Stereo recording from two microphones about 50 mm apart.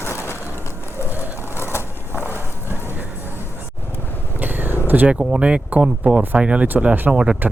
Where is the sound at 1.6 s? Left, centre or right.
Left.